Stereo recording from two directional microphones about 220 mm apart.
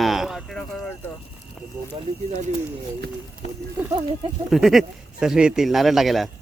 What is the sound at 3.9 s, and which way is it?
Speech, 20° right (ahead or behind).